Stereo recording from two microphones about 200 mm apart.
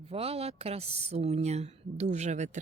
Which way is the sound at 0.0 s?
30° right (ahead or behind).